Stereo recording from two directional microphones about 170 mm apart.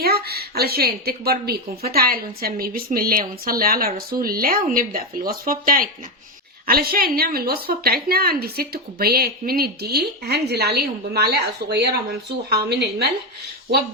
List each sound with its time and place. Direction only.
0.0 s a woman's voice: 65° right (ahead or behind)